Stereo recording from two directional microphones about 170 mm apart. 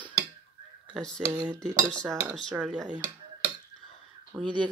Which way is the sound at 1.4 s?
25° right (ahead or behind).